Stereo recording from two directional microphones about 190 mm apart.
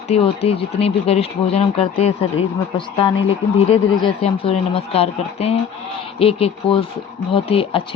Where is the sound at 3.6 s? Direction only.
30° left (ahead or behind).